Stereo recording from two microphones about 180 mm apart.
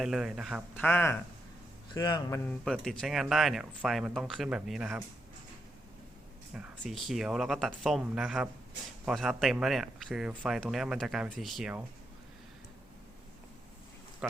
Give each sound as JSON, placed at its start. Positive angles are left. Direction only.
{"t": 0.0, "sound": "a man's voice", "side_deg": 0}
{"t": 0.8, "sound": "speech", "side_deg": 10}
{"t": 1.9, "sound": "speech", "side_deg": 25}
{"t": 2.5, "sound": "a man's voice", "side_deg": 5}
{"t": 6.5, "sound": "a man's voice", "side_deg": 0}